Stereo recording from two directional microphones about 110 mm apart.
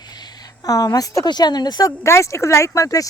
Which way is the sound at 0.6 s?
35° left (ahead or behind).